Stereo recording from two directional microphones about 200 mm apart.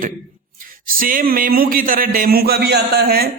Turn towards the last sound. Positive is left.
turn(degrees=-50)  # may be behind; listen again after turning